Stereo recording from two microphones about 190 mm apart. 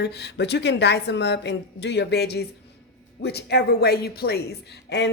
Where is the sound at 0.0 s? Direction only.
60° left (ahead or behind).